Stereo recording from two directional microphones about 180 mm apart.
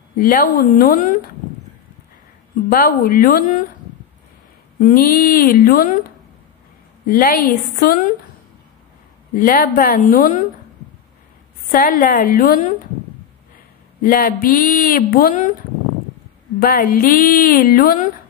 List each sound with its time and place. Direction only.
0.2 s speech: 50° left (ahead or behind)
2.7 s speech: 55° left (ahead or behind)
4.7 s speech: 50° left (ahead or behind)
9.3 s speech: 50° left (ahead or behind)
11.7 s speech: 50° left (ahead or behind)
14.0 s speech: 50° left (ahead or behind)
16.5 s speech: 55° left (ahead or behind)